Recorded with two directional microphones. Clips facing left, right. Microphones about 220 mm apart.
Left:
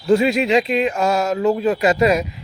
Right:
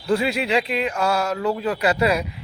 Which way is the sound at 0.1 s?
20° left (ahead or behind).